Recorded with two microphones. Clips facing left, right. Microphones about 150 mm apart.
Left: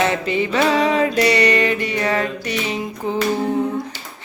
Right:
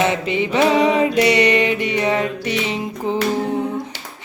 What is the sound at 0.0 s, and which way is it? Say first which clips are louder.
Music: even; 20° right (ahead or behind).